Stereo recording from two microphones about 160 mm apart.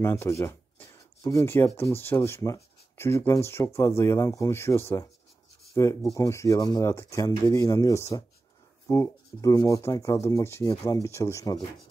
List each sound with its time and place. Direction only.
0.0 s speech: 15° left (ahead or behind)